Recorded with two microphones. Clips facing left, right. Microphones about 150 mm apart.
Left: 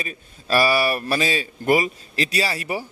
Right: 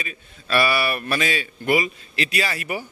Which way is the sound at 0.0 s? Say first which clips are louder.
Left 2 dB; 35° left (ahead or behind).